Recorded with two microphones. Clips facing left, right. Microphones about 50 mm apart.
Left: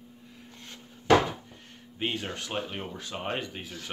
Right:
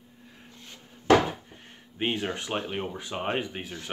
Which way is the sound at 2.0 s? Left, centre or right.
Right.